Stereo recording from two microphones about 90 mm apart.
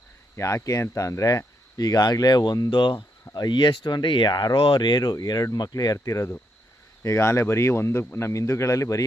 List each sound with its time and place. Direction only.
0.3 s speech: 35° left (ahead or behind); by 4.3 s 60° left (ahead or behind)
4.3 s speech: 50° left (ahead or behind)
4.6 s speech: 60° left (ahead or behind); by 9.0 s 40° left (ahead or behind)